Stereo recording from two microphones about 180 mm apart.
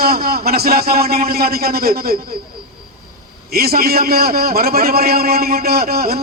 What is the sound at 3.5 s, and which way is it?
A man's voice, 60° right (ahead or behind).